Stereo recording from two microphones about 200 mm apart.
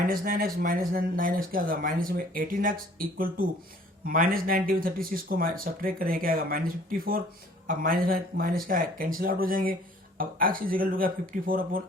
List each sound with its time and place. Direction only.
0.1 s speech: 45° right (ahead or behind)